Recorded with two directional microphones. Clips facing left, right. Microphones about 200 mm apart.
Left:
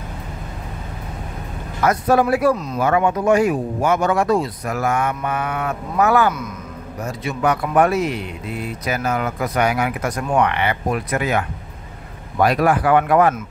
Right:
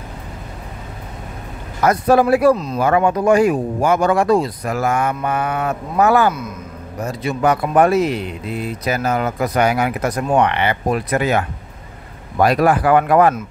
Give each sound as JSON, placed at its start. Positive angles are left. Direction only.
{"t": 1.9, "sound": "speech", "side_deg": -35}